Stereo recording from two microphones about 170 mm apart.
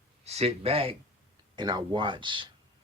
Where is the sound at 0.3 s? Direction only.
40° right (ahead or behind).